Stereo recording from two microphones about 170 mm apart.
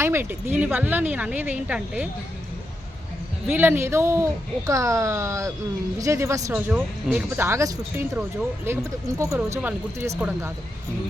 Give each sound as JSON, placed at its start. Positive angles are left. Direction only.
{"t": 0.0, "sound": "speech", "side_deg": -15}
{"t": 3.4, "sound": "speech", "side_deg": -10}